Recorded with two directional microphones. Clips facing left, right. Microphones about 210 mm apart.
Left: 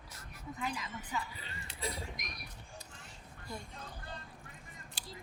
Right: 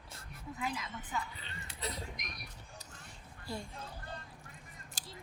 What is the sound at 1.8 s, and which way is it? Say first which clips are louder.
Speech: left 1 dB; 10° left (ahead or behind).